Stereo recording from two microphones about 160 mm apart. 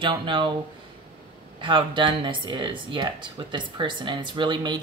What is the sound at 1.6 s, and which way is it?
Speech, 30° right (ahead or behind).